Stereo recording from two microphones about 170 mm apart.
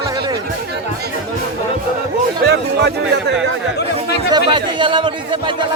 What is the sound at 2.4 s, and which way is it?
Speech, 80° right.